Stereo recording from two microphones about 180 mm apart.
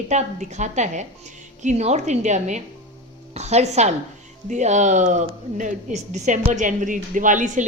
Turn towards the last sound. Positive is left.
turn(degrees=-45)  # may be behind; listen again after turning